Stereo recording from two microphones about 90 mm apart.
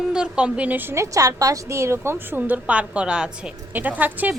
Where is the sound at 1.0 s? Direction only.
40° right (ahead or behind).